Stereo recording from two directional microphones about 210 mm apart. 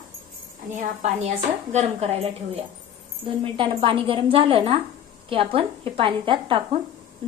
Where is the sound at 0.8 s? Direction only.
35° right (ahead or behind).